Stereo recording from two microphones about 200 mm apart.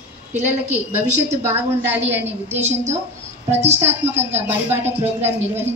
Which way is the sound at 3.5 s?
35° right (ahead or behind).